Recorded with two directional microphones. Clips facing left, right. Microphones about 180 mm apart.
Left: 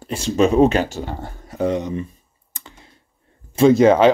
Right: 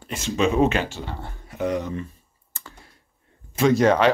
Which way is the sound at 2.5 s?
20° left (ahead or behind).